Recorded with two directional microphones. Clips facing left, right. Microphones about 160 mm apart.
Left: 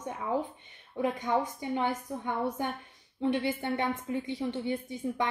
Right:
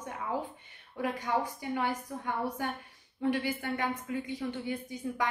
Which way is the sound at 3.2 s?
20° left (ahead or behind).